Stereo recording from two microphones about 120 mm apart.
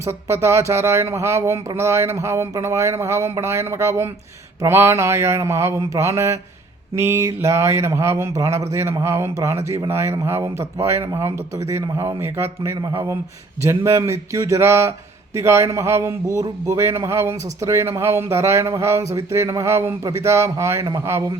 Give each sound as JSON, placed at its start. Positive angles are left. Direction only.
{"t": 0.0, "sound": "speech", "side_deg": -25}